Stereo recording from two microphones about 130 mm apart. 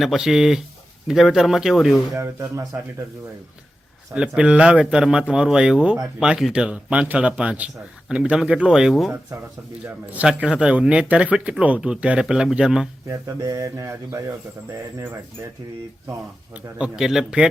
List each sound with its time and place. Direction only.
0.0 s speech: centre (ahead or behind)
2.1 s speech: 20° right (ahead or behind)
4.1 s speech: 10° right (ahead or behind)
13.1 s speech: 25° right (ahead or behind)
16.7 s speech: 5° right (ahead or behind)